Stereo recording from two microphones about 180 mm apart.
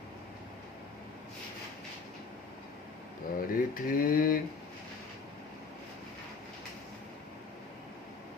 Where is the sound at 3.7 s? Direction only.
50° left (ahead or behind).